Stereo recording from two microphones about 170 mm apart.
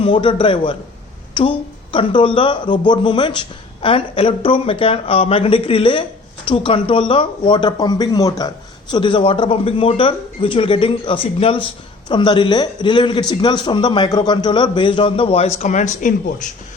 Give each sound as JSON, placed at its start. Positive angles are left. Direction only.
{"t": 0.0, "sound": "speech", "side_deg": 30}